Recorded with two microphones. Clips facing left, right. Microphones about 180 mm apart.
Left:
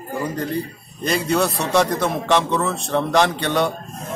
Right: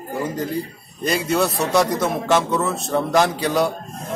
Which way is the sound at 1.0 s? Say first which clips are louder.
Even; centre (ahead or behind).